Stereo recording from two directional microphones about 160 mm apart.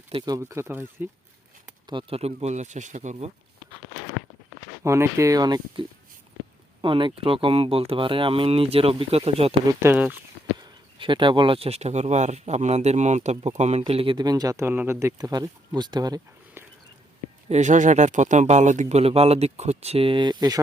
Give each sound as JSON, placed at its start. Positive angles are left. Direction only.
{"t": 0.1, "sound": "speech", "side_deg": -30}
{"t": 0.3, "sound": "speech", "side_deg": -15}
{"t": 1.9, "sound": "speech", "side_deg": -35}
{"t": 4.8, "sound": "speech", "side_deg": -15}
{"t": 6.8, "sound": "speech", "side_deg": -35}
{"t": 9.6, "sound": "speech", "side_deg": -15}
{"t": 10.6, "sound": "speech", "side_deg": -30}
{"t": 17.5, "sound": "speech", "side_deg": -50}